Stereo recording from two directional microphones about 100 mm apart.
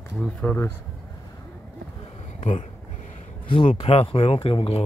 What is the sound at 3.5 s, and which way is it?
Speech, 70° left (ahead or behind).